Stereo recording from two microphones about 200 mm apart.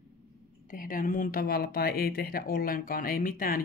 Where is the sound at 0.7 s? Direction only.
45° left (ahead or behind).